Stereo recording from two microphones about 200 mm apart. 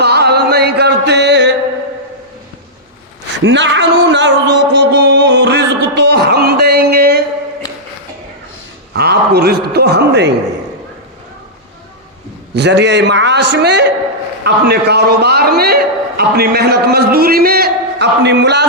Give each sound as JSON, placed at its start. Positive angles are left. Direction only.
{"t": 0.0, "sound": "a sound", "side_deg": -55}
{"t": 3.4, "sound": "music", "side_deg": -65}
{"t": 8.9, "sound": "a man's voice", "side_deg": -55}
{"t": 12.5, "sound": "music", "side_deg": -60}
{"t": 14.4, "sound": "a man's voice", "side_deg": -55}